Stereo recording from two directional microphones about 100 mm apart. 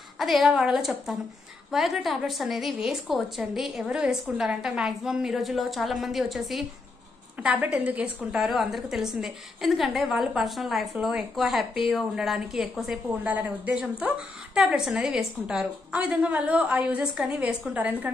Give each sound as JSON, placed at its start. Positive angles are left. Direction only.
{"t": 0.2, "sound": "a woman's voice", "side_deg": -5}
{"t": 7.6, "sound": "a woman's voice", "side_deg": -15}